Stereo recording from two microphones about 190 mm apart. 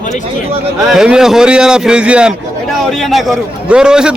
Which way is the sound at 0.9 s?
5° right (ahead or behind).